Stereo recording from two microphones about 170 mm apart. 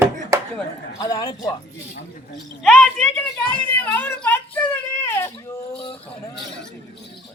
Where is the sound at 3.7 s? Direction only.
10° left (ahead or behind).